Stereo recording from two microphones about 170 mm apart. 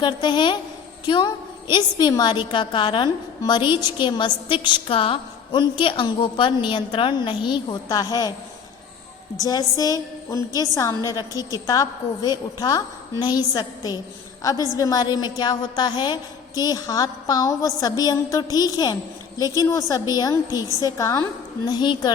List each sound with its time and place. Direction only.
0.0 s a woman's voice: 25° left (ahead or behind)
9.4 s a woman's voice: 20° left (ahead or behind)